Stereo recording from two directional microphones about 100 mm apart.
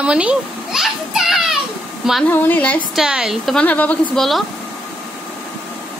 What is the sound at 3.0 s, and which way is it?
Speech, 5° right (ahead or behind).